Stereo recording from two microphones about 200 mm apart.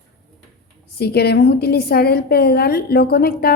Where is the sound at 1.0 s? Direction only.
55° left (ahead or behind).